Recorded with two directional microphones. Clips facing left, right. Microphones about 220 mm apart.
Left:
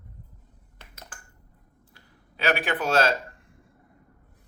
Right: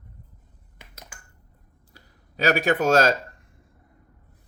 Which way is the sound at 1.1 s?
10° right (ahead or behind).